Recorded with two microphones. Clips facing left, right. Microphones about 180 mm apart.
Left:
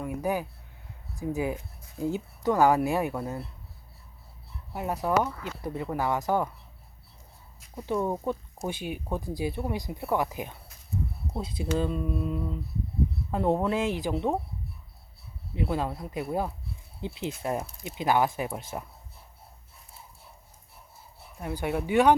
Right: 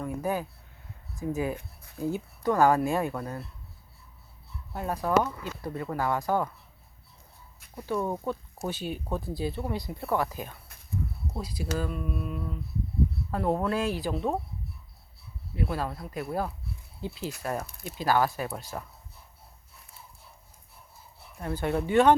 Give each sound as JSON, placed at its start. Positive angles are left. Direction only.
{"t": 0.0, "sound": "a sound", "side_deg": 15}
{"t": 1.3, "sound": "speech", "side_deg": 15}
{"t": 4.7, "sound": "speech", "side_deg": 15}
{"t": 8.0, "sound": "speech", "side_deg": 15}
{"t": 15.5, "sound": "speech", "side_deg": 20}
{"t": 21.3, "sound": "speech", "side_deg": 10}